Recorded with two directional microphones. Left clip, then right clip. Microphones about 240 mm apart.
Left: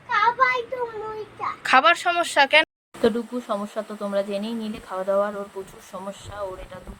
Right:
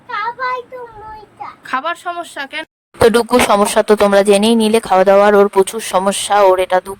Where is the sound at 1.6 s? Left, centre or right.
Centre.